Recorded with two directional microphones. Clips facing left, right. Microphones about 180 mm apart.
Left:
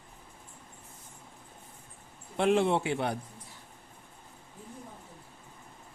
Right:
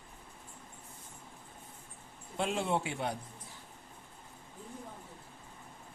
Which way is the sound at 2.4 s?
65° left (ahead or behind).